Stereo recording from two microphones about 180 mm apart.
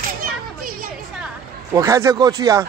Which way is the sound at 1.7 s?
20° right (ahead or behind).